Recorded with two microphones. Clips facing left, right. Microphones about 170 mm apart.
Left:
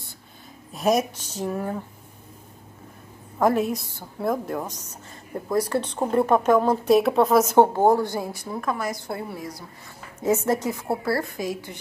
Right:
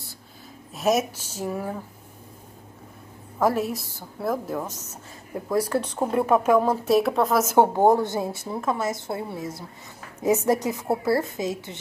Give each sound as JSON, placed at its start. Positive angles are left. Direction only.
{"t": 0.7, "sound": "a woman's voice", "side_deg": -5}
{"t": 3.3, "sound": "a woman's voice", "side_deg": 0}